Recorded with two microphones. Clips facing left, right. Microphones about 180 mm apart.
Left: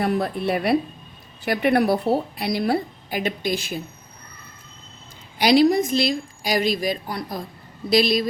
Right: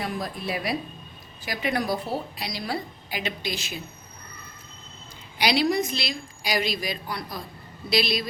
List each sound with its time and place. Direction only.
0.0 s a woman's voice: 60° left (ahead or behind)
5.4 s a woman's voice: 45° left (ahead or behind)